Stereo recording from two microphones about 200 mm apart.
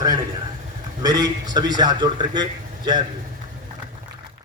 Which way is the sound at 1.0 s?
20° right (ahead or behind).